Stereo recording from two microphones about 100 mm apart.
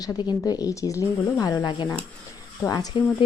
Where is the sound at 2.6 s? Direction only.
40° left (ahead or behind).